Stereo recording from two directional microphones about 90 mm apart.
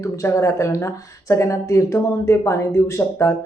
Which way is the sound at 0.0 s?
35° left (ahead or behind).